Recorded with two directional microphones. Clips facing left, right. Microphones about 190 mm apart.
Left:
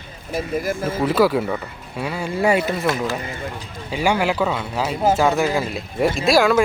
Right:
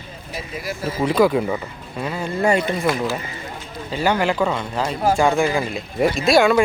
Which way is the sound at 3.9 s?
10° left (ahead or behind).